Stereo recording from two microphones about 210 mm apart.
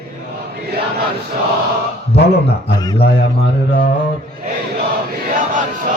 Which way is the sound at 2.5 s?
25° left (ahead or behind).